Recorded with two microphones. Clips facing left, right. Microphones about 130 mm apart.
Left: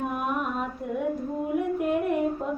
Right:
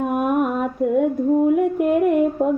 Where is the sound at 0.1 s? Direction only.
55° right (ahead or behind).